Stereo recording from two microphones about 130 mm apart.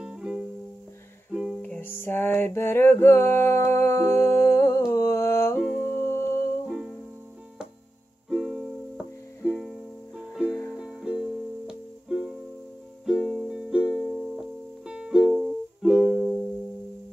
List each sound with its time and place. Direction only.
0.0 s music: 5° right (ahead or behind)
1.6 s music: 15° left (ahead or behind)
8.3 s music: 5° right (ahead or behind)